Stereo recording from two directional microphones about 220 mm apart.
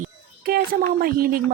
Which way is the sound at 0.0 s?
40° right (ahead or behind).